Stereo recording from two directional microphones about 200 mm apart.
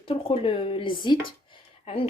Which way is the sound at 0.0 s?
30° left (ahead or behind).